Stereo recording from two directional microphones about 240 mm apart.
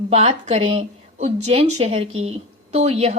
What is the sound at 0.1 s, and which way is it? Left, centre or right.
Speech, right.